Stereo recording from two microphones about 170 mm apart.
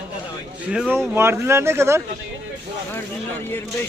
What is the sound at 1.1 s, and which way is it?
Speech, 15° right (ahead or behind).